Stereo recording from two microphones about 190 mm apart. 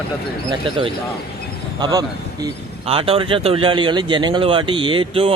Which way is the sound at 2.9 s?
30° right (ahead or behind).